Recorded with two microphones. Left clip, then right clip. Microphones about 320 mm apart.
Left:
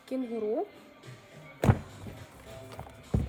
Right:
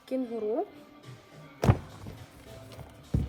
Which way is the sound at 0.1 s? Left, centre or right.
Centre.